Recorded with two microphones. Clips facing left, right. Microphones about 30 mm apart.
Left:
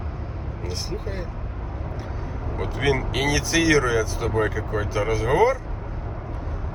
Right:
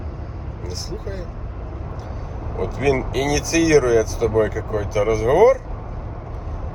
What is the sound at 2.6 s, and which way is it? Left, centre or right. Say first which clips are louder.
Speech: right 4 dB; left.